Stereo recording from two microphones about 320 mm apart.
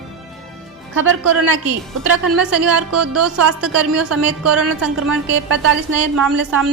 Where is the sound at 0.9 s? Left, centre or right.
Right.